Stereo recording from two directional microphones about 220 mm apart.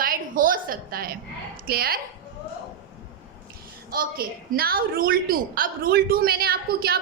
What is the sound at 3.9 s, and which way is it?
A woman's voice, 45° right (ahead or behind).